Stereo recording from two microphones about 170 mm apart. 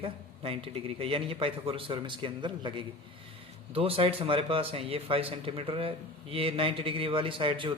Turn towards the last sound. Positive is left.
turn(degrees=-30)  # may be behind; listen again after turning